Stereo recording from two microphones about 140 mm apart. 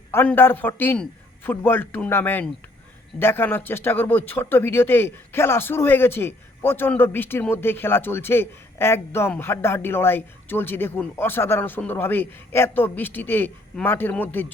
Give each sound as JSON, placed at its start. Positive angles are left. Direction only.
{"t": 0.1, "sound": "speech", "side_deg": 15}